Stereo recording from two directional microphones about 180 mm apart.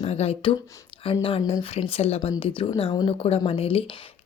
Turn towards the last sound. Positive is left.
turn(degrees=30)  # may be behind; listen again after turning